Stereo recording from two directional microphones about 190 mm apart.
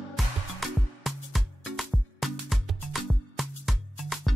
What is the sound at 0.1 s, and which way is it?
Music, centre (ahead or behind).